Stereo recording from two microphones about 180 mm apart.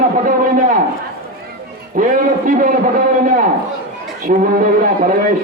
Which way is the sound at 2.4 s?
45° right (ahead or behind).